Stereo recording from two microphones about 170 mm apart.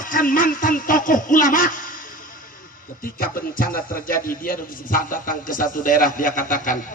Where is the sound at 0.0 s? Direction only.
55° left (ahead or behind).